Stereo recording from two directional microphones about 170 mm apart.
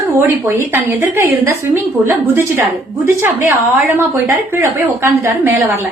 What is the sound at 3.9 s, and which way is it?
A woman's voice, 15° right (ahead or behind).